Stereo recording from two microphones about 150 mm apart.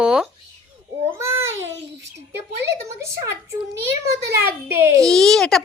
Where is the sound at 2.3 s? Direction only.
15° right (ahead or behind).